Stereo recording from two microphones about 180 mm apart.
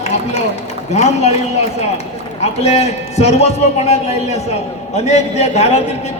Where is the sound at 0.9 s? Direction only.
35° left (ahead or behind).